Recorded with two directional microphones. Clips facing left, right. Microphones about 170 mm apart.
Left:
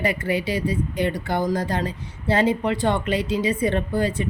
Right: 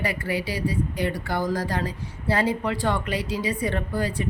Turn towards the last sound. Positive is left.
turn(degrees=25)  # may be behind; listen again after turning